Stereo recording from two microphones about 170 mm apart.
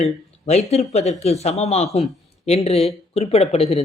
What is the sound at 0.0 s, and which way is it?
Speech, 40° left (ahead or behind).